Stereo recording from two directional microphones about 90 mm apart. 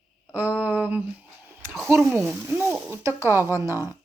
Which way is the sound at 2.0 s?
5° right (ahead or behind).